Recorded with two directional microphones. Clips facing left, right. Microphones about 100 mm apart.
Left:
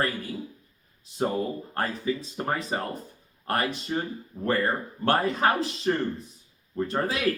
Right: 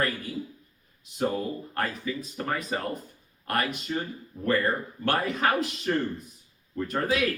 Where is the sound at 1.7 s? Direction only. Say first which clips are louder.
Left 3 dB; 30° left (ahead or behind).